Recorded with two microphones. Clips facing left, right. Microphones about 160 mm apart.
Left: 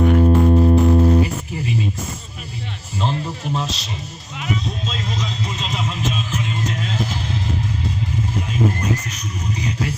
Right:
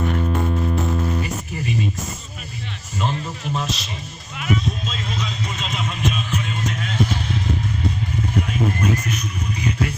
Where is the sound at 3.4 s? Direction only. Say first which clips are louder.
Left 1 dB; 35° left (ahead or behind).